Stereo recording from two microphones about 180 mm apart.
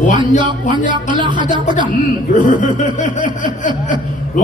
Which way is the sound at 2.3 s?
45° left (ahead or behind).